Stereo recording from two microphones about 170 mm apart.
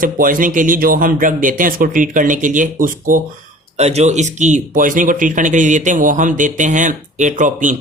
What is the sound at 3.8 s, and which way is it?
Speech, 40° right (ahead or behind).